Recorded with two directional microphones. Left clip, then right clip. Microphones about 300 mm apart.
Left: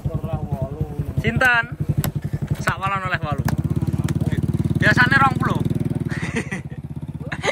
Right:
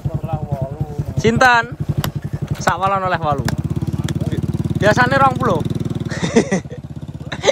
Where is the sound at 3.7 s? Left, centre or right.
Centre.